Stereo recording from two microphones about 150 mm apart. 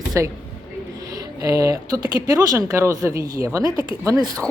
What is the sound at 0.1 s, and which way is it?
A woman's voice, 20° right (ahead or behind).